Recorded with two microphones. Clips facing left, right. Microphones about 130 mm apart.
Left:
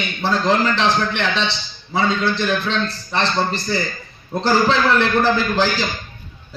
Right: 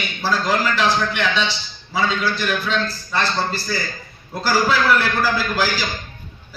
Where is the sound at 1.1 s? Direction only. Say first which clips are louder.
Even; 5° right (ahead or behind).